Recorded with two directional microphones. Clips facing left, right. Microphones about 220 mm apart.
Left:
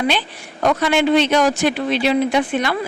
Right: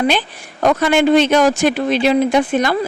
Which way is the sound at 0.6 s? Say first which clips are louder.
Right 3 dB; 45° right (ahead or behind).